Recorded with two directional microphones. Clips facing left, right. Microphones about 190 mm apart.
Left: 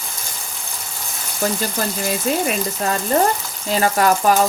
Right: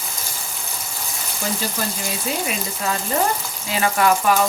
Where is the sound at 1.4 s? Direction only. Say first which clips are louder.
Left 4 dB; 45° left (ahead or behind).